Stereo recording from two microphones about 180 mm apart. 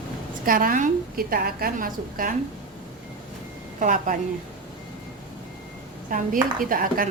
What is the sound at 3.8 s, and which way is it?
Speech, 45° right (ahead or behind).